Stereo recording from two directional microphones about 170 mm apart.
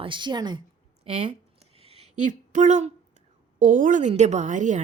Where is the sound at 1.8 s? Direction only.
35° right (ahead or behind).